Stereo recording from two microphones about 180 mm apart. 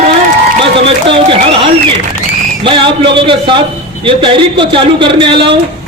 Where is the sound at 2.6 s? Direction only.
30° right (ahead or behind).